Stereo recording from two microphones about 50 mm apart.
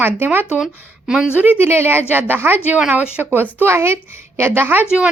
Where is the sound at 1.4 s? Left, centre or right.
Right.